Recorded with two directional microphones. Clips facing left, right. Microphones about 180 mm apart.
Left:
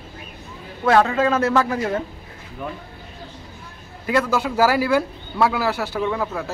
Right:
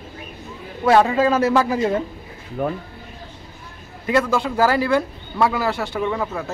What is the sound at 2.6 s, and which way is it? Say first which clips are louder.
Speech: right 8 dB; 50° right (ahead or behind).